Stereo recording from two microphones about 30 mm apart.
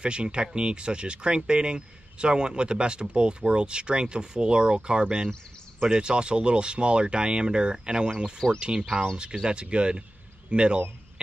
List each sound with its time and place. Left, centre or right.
0.0 s speech: right
8.4 s speech: left
9.1 s speech: right